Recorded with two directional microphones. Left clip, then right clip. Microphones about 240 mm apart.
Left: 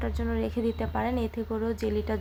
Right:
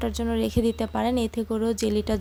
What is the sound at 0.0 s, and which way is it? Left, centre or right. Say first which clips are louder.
A woman's voice: right 5 dB; right.